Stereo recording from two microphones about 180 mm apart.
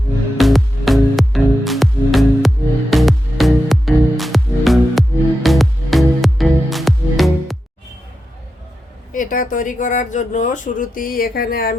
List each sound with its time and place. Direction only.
0.3 s music: centre (ahead or behind)
9.1 s speech: 50° left (ahead or behind)